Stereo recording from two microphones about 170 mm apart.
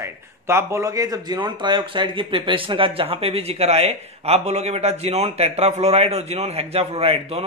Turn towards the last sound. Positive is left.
turn(degrees=-35)  # may be behind; listen again after turning